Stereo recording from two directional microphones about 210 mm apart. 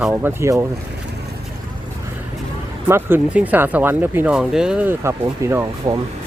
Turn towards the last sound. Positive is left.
turn(degrees=-15)  # may be behind; listen again after turning